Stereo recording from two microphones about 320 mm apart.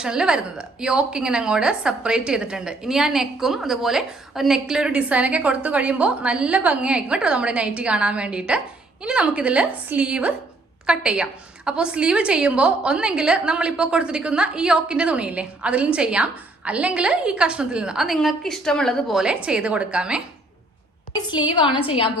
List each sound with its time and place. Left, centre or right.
0.0 s a woman's voice: centre
21.2 s a woman's voice: centre